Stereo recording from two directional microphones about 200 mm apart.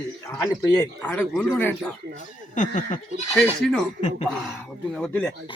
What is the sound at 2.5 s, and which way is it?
Speech, 40° left (ahead or behind).